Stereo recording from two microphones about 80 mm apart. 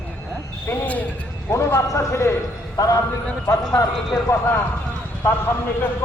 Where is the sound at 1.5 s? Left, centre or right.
Left.